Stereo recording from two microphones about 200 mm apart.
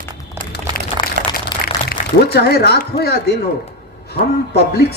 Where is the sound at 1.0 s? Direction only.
25° left (ahead or behind).